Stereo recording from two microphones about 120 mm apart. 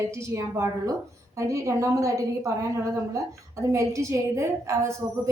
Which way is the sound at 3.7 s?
25° right (ahead or behind).